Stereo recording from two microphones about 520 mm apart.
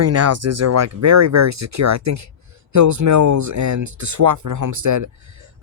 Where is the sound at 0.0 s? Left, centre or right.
Right.